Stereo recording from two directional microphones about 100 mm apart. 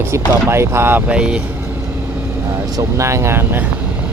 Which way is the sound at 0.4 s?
25° right (ahead or behind).